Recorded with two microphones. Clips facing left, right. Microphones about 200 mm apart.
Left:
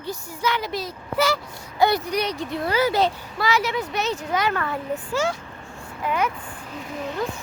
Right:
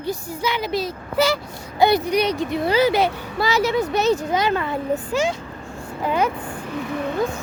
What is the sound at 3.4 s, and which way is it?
Speech, 40° right (ahead or behind).